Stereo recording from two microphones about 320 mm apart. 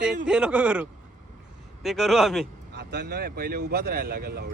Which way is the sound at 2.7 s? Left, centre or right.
Right.